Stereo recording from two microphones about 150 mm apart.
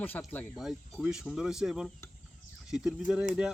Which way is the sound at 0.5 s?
5° right (ahead or behind).